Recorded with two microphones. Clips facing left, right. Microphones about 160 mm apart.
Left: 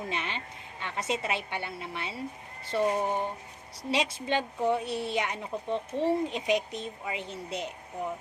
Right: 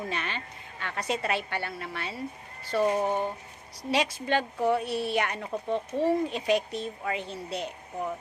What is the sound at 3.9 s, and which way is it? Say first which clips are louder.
A woman's voice: right 2 dB; 25° left (ahead or behind).